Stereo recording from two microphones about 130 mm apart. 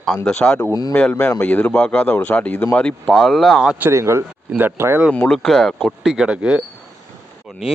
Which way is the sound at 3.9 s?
20° right (ahead or behind).